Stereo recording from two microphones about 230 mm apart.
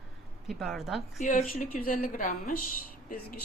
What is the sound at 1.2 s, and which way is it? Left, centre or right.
Speech, left.